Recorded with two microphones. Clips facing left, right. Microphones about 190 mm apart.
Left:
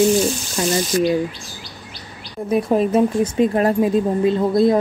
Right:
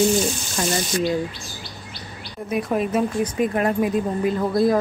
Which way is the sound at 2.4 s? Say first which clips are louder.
Left 5 dB; 30° left (ahead or behind).